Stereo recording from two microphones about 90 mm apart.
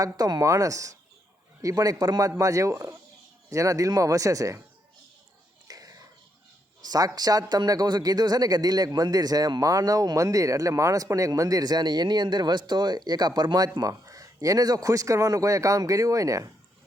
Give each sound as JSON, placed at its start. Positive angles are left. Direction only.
{"t": 0.0, "sound": "a man's voice", "side_deg": -40}
{"t": 2.4, "sound": "speech", "side_deg": -35}
{"t": 5.6, "sound": "a sound", "side_deg": -45}
{"t": 6.8, "sound": "a man's voice", "side_deg": -45}
{"t": 13.7, "sound": "speech", "side_deg": -40}